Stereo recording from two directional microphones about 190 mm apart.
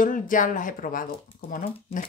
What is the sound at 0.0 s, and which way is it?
Speech, 45° left (ahead or behind).